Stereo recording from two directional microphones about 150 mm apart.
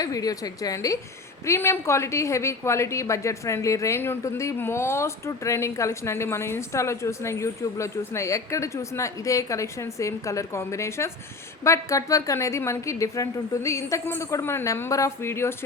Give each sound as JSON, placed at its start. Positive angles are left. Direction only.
{"t": 0.0, "sound": "a woman's voice", "side_deg": 25}